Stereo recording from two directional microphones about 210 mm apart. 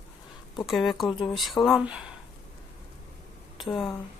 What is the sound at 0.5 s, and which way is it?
Speech, centre (ahead or behind).